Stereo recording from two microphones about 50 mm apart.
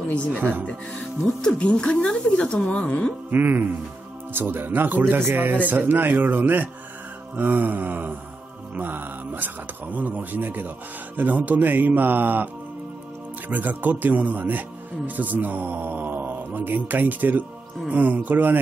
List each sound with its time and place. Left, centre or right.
1.4 s speech: centre
3.3 s speech: right
13.5 s speech: right